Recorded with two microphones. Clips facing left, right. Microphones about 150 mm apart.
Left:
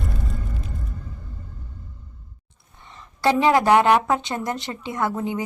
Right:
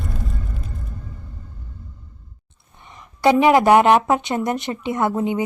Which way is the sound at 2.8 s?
15° right (ahead or behind).